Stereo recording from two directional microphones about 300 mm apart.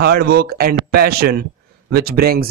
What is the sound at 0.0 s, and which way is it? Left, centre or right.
A man's voice, right.